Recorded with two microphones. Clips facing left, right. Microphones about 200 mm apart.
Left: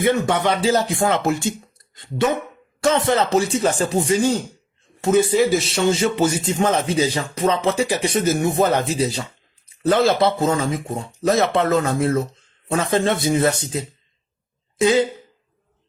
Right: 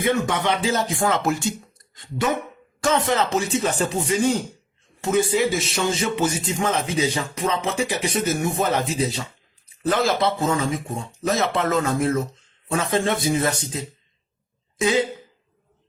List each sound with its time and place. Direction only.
0.3 s a man's voice: 35° left (ahead or behind)
2.8 s a man's voice: 35° left (ahead or behind)